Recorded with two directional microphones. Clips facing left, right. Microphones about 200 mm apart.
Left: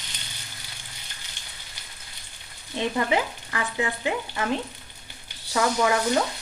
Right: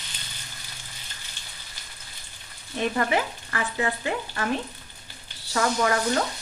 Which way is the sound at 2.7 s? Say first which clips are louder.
Even; 20° left (ahead or behind).